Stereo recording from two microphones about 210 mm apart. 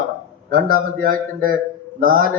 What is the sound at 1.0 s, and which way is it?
A man's voice, 40° right (ahead or behind).